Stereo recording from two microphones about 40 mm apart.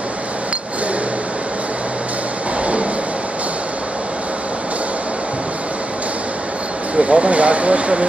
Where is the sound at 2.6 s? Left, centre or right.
Right.